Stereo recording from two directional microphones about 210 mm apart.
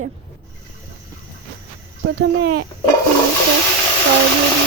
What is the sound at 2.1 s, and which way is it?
Speech, 55° right (ahead or behind).